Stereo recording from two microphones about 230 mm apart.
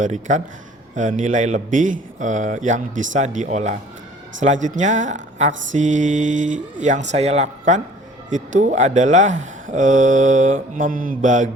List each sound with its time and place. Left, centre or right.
0.0 s speech: right